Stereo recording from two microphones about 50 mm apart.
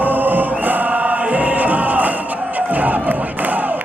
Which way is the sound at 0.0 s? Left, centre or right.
Right.